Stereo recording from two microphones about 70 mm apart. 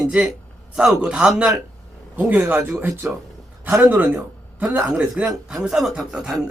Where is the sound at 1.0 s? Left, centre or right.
Centre.